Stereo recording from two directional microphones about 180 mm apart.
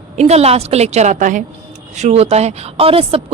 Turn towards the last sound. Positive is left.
turn(degrees=-30)  # may be behind; listen again after turning